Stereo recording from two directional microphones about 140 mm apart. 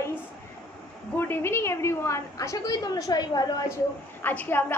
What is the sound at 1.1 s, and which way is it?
A woman's voice, 15° left (ahead or behind).